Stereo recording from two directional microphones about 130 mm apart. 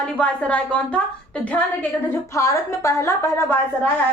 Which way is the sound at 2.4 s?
25° left (ahead or behind).